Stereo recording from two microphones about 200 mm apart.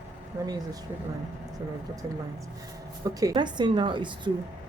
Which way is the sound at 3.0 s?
20° right (ahead or behind).